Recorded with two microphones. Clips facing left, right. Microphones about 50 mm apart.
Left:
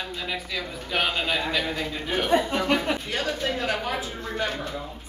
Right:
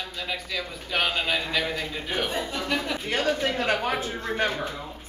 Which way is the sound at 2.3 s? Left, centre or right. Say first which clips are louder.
Left 6 dB; left.